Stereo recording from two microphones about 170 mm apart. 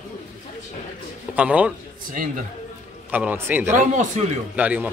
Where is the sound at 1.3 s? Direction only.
10° right (ahead or behind).